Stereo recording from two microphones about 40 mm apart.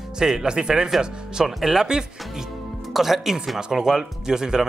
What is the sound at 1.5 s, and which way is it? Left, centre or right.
Speech, centre.